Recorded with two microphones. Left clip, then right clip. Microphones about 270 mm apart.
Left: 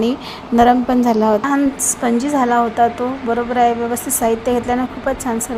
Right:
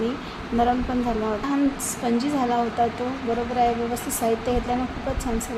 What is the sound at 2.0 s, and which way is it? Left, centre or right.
A woman's voice, left.